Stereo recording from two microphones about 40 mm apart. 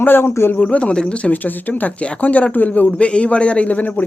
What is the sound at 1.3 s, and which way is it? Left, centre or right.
Speech, left.